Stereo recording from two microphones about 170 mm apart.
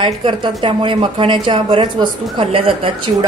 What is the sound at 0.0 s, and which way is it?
A woman's voice, 30° right (ahead or behind).